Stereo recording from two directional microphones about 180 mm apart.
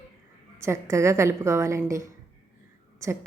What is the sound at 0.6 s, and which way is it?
Speech, 15° right (ahead or behind).